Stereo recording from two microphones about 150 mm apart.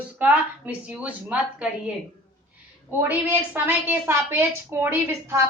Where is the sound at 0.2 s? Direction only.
10° right (ahead or behind).